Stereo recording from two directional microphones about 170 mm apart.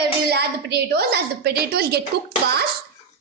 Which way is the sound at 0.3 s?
70° right (ahead or behind).